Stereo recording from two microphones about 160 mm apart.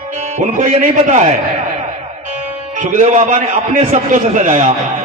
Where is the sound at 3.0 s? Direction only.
50° right (ahead or behind).